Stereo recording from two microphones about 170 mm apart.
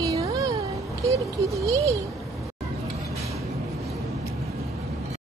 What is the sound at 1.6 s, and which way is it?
Speech, 20° right (ahead or behind).